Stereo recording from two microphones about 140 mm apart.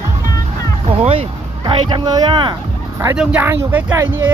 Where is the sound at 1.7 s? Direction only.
40° right (ahead or behind).